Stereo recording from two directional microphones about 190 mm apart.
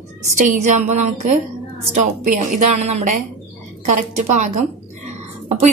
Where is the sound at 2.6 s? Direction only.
40° right (ahead or behind).